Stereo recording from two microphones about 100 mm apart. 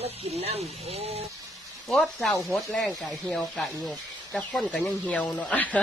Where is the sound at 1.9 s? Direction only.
5° left (ahead or behind).